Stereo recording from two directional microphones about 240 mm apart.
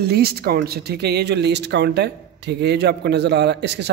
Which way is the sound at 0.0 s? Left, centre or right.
Right.